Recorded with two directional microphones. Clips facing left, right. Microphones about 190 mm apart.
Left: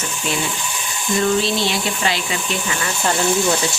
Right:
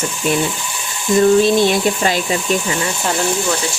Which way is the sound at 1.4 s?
50° right (ahead or behind).